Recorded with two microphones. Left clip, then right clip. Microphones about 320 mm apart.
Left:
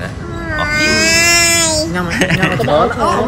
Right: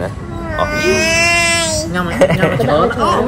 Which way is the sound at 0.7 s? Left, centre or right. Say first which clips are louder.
Left 2 dB; left.